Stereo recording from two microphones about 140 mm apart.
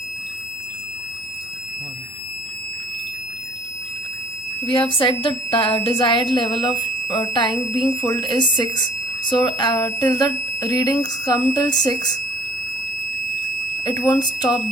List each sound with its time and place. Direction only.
4.6 s speech: 35° left (ahead or behind)
14.1 s speech: 30° left (ahead or behind)